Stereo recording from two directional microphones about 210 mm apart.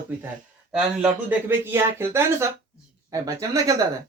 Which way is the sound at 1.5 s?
10° right (ahead or behind).